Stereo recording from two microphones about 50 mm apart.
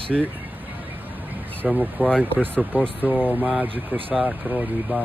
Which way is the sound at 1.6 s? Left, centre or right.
Right.